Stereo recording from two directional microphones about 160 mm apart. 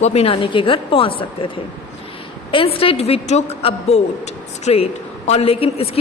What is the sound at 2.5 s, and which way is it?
A woman's voice, 35° left (ahead or behind).